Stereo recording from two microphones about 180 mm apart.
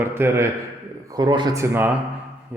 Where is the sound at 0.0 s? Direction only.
15° right (ahead or behind).